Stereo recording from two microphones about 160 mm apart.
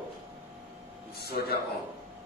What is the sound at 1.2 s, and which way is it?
Speech, 80° left.